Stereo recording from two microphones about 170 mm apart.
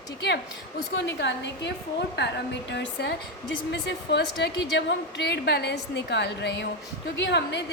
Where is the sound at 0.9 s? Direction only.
90° left.